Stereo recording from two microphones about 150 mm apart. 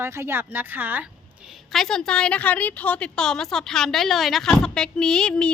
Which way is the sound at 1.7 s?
Centre (ahead or behind).